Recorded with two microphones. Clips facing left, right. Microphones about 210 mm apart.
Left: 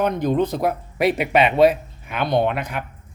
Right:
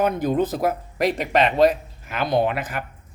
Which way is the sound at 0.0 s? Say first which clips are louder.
Left 1 dB; 5° right (ahead or behind).